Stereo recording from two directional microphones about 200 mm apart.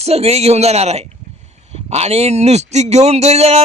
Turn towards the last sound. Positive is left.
turn(degrees=-30)  # may be behind; listen again after turning